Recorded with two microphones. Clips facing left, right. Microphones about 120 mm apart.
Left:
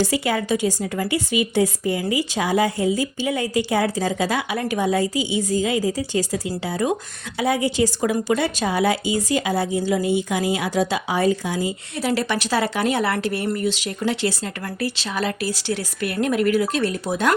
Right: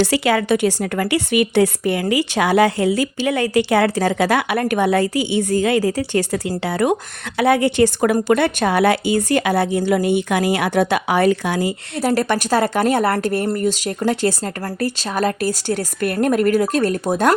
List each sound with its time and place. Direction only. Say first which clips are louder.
0.0 s a woman's voice: right 4 dB; 75° right (ahead or behind)
11.9 s speech: right 4 dB; 45° right (ahead or behind)